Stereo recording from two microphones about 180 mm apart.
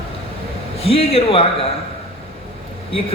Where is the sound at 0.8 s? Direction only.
30° left (ahead or behind).